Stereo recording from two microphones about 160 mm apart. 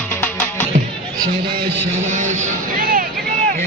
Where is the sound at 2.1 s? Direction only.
50° right (ahead or behind).